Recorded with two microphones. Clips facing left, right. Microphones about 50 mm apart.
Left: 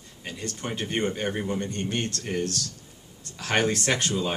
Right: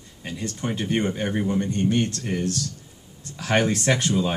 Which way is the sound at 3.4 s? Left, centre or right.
Right.